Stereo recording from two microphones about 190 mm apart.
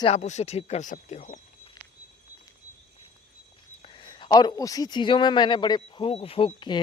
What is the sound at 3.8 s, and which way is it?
Speech, 25° left (ahead or behind).